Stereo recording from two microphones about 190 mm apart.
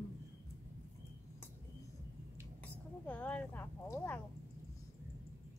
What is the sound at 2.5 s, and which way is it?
Speech, 10° left (ahead or behind).